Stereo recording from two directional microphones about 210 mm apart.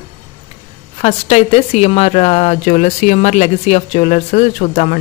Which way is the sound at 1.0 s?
30° left (ahead or behind).